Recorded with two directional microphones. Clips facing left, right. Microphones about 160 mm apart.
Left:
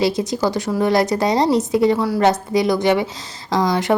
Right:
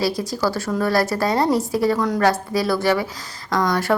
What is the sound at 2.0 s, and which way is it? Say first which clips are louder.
Speech: left 1 dB; 10° left (ahead or behind).